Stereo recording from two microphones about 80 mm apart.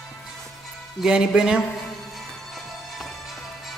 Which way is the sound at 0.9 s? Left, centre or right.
Centre.